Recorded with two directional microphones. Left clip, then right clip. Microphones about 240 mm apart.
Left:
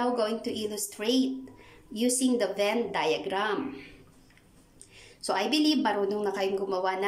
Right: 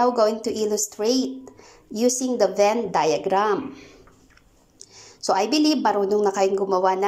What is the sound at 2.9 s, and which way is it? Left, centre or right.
Speech, centre.